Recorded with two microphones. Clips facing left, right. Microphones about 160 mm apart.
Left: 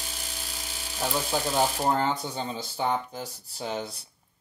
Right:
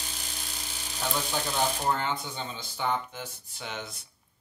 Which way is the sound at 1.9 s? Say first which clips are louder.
Left 4 dB; 35° left (ahead or behind).